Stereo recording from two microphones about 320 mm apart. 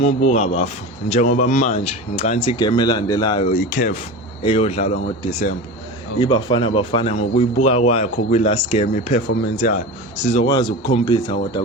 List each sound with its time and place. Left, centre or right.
0.0 s speech: left